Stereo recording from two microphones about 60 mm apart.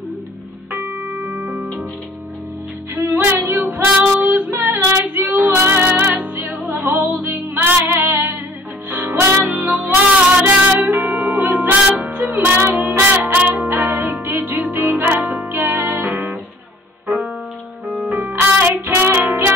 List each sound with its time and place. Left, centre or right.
0.7 s music: right
1.4 s music: right
2.9 s music: right
4.2 s female singing: right
5.5 s music: right
13.7 s music: right
17.8 s music: centre
18.4 s music: right